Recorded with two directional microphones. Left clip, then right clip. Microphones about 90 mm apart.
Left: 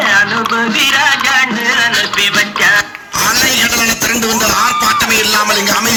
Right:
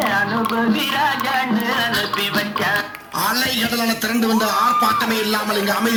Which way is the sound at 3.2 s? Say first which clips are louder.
Left 9 dB; 50° right (ahead or behind).